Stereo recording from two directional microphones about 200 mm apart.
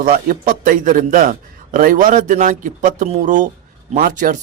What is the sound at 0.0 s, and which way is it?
A man's voice, 45° right (ahead or behind).